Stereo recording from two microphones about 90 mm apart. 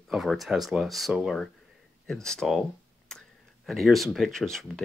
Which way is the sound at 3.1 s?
5° left (ahead or behind).